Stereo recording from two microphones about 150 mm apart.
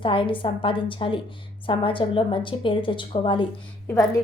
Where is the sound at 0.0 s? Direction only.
35° left (ahead or behind).